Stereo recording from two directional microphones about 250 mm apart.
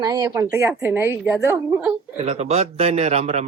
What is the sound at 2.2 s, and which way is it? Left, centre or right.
A man's voice, right.